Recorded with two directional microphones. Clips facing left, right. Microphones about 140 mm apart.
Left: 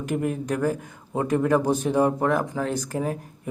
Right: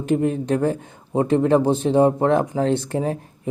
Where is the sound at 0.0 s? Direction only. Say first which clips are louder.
Right 6 dB; 25° right (ahead or behind).